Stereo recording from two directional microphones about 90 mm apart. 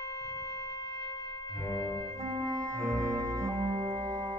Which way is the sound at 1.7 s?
35° left (ahead or behind).